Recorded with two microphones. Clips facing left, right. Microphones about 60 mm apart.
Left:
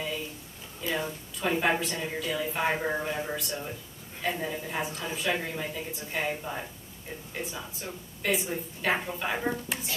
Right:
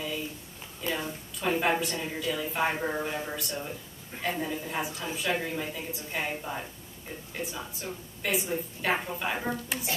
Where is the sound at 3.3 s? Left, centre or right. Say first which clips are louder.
Left 1 dB; centre.